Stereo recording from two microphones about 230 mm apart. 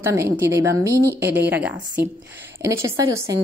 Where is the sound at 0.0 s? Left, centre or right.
Centre.